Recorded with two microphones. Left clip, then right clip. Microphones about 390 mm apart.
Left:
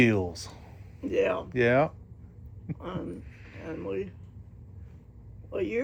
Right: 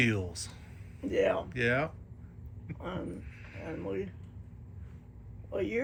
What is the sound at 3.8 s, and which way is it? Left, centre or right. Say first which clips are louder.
Speech: left 3 dB; centre.